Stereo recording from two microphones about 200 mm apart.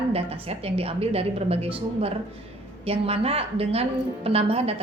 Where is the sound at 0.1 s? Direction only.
30° right (ahead or behind).